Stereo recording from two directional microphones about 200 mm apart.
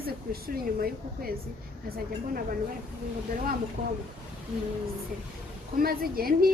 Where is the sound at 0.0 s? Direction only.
50° right (ahead or behind).